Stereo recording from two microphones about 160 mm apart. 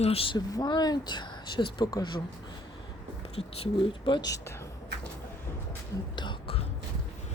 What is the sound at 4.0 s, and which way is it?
Speech, 30° left (ahead or behind).